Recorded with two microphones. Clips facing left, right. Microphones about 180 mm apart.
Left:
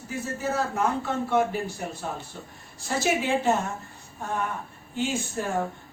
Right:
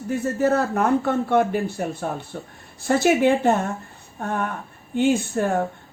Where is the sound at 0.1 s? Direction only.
60° right (ahead or behind).